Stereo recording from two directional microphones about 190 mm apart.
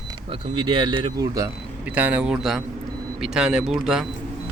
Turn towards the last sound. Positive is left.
turn(degrees=-5)  # may be behind; listen again after turning